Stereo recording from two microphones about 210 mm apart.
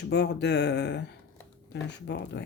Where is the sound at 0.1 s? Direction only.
55° left (ahead or behind).